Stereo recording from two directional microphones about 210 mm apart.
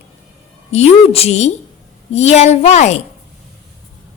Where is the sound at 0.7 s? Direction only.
30° left (ahead or behind).